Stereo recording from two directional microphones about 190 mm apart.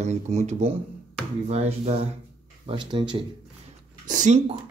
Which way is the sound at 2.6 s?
25° right (ahead or behind).